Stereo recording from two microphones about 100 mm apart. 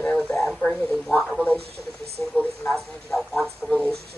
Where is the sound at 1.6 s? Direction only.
90° right.